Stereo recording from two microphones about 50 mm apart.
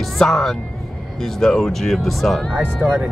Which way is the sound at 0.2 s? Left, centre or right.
Centre.